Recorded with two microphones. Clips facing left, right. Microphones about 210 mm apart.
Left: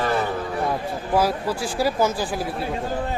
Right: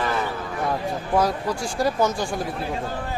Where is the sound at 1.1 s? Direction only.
5° left (ahead or behind).